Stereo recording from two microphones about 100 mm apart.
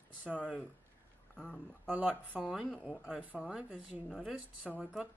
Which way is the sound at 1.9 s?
15° right (ahead or behind).